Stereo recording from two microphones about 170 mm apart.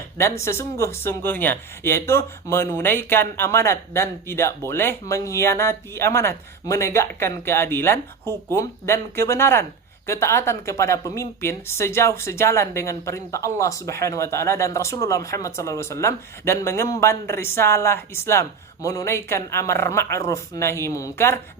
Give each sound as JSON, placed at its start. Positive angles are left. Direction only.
{"t": 0.2, "sound": "a woman's voice", "side_deg": 15}